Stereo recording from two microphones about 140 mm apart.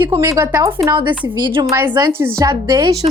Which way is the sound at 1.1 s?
35° right (ahead or behind).